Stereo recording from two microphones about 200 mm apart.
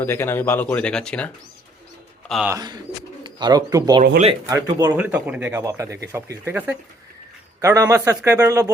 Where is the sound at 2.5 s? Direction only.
20° right (ahead or behind).